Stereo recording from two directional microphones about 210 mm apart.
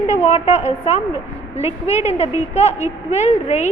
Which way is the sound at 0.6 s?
35° left (ahead or behind).